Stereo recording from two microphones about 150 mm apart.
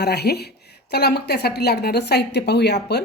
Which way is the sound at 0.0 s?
90° left.